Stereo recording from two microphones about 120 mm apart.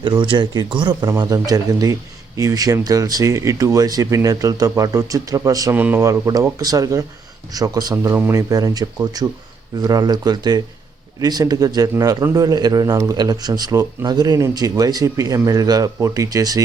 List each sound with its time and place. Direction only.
0.0 s a man's voice: 40° right (ahead or behind)
5.7 s speech: 15° right (ahead or behind)
6.0 s a man's voice: 30° right (ahead or behind)